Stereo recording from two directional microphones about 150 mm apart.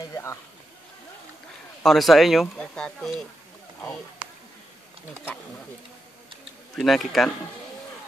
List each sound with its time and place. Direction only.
0.0 s a sound: 20° left (ahead or behind)
1.8 s speech: centre (ahead or behind)
6.7 s speech: centre (ahead or behind)